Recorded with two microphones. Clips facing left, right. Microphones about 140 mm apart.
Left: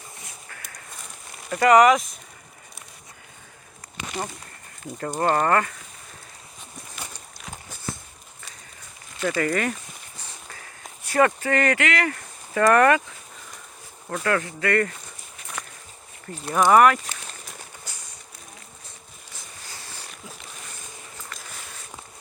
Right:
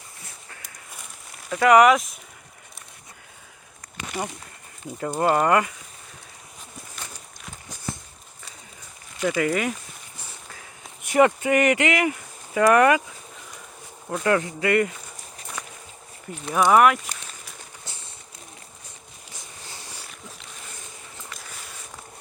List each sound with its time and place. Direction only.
1.5 s speech: centre (ahead or behind)
4.1 s speech: 10° right (ahead or behind)
9.2 s speech: 10° right (ahead or behind)
11.0 s speech: 15° right (ahead or behind)
14.1 s speech: 20° right (ahead or behind)
16.3 s speech: 15° right (ahead or behind)
16.6 s speech: centre (ahead or behind)
17.8 s a sound: 30° right (ahead or behind)